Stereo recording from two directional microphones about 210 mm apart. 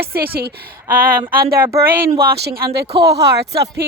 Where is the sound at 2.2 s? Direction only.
50° right (ahead or behind).